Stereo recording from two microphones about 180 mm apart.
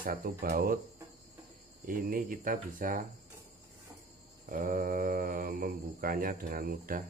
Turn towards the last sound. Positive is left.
turn(degrees=-55)  # may be behind; listen again after turning